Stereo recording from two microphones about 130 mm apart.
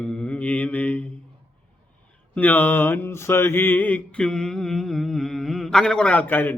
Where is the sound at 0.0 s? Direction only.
10° left (ahead or behind).